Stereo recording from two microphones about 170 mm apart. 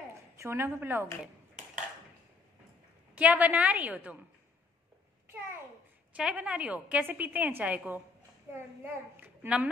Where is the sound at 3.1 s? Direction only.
10° right (ahead or behind).